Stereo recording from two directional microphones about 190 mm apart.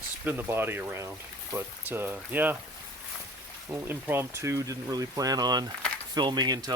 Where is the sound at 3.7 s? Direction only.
10° right (ahead or behind).